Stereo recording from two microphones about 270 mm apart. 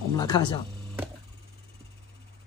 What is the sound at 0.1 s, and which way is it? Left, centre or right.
Speech, centre.